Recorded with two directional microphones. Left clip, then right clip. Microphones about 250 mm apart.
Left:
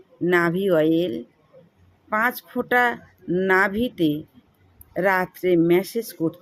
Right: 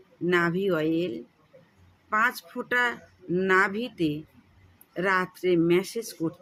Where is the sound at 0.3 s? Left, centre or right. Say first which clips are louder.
Left 5 dB; centre.